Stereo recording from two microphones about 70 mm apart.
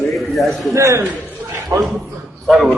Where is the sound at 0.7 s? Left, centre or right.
Right.